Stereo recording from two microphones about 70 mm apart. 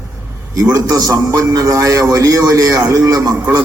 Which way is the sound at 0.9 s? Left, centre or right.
Right.